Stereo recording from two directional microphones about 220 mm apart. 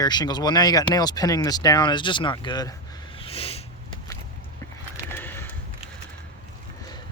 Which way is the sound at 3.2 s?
25° left (ahead or behind).